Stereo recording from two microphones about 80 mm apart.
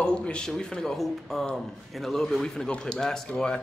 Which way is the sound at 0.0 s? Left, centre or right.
Centre.